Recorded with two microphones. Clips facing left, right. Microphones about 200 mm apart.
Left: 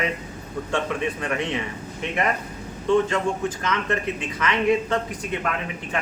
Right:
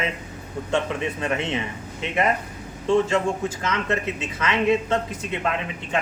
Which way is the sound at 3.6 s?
25° right (ahead or behind).